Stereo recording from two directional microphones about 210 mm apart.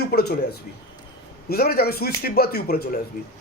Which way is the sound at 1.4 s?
45° left (ahead or behind).